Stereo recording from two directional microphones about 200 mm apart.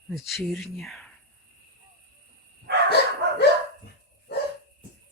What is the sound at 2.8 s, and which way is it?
Bow-wow, 55° left (ahead or behind).